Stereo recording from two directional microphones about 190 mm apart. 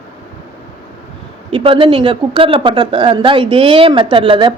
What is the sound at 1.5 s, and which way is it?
Speech, 30° right (ahead or behind).